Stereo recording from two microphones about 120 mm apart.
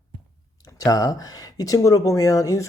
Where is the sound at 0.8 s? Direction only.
30° left (ahead or behind).